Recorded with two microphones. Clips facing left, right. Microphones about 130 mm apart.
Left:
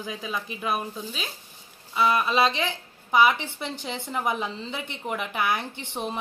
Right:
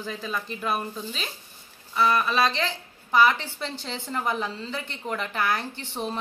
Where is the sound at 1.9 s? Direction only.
20° left (ahead or behind).